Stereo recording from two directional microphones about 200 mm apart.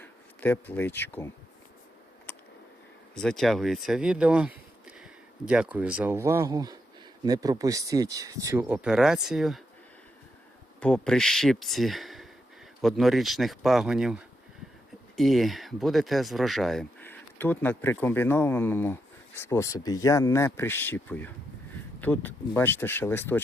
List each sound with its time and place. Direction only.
0.0 s speech: 10° left (ahead or behind)
3.2 s speech: centre (ahead or behind)
10.8 s speech: 5° left (ahead or behind)